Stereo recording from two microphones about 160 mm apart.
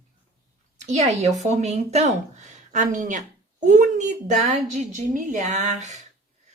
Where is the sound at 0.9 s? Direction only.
45° right (ahead or behind).